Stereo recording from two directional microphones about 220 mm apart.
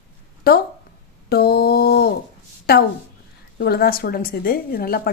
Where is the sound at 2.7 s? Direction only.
45° left (ahead or behind).